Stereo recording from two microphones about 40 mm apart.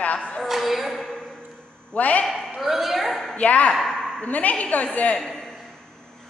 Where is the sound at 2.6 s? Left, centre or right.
Centre.